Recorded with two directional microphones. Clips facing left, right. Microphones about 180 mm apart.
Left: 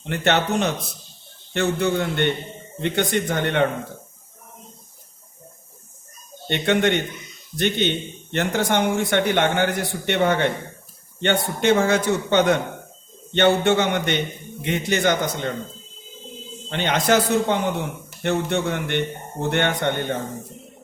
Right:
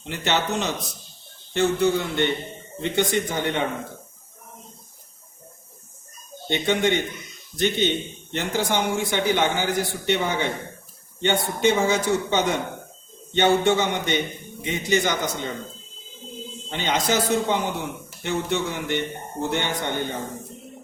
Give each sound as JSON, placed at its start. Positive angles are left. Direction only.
{"t": 0.1, "sound": "a man's voice", "side_deg": 60}
{"t": 6.5, "sound": "a man's voice", "side_deg": 60}
{"t": 16.6, "sound": "a man's voice", "side_deg": 60}